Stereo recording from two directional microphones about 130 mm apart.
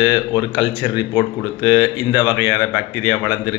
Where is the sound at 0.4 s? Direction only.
15° right (ahead or behind).